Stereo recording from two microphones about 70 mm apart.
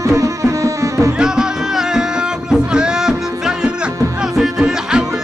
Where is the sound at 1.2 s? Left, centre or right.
Centre.